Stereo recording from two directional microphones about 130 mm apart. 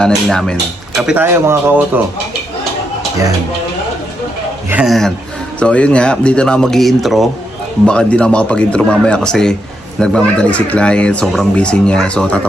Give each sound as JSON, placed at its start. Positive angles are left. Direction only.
{"t": 0.0, "sound": "speech", "side_deg": 5}
{"t": 1.1, "sound": "speech", "side_deg": -20}
{"t": 4.9, "sound": "speech", "side_deg": 5}